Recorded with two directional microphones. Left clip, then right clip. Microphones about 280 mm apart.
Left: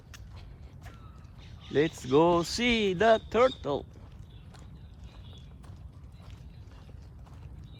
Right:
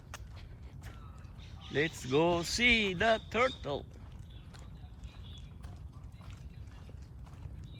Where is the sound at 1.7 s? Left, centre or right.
Centre.